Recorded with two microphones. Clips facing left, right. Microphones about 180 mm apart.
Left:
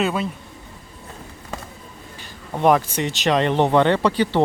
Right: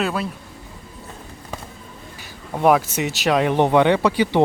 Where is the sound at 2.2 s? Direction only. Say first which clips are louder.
Even; 5° right (ahead or behind).